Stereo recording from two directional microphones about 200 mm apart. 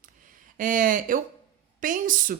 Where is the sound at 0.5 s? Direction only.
40° right (ahead or behind).